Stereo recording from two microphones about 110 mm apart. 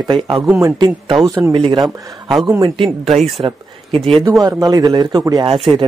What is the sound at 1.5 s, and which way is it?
Speech, 50° right (ahead or behind).